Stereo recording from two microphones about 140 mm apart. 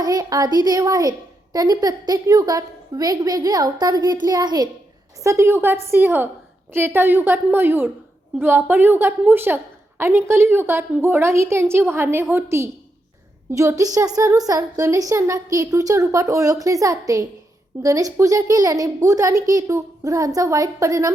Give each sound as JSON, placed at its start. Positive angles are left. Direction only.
{"t": 0.0, "sound": "a woman's voice", "side_deg": -25}